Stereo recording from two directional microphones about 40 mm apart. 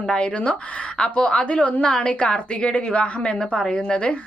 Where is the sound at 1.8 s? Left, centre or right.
Centre.